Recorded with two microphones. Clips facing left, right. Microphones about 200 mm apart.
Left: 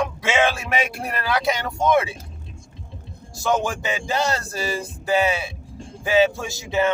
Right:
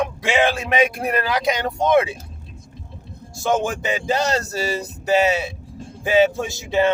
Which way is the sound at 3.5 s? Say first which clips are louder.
Right 1 dB; 45° right (ahead or behind).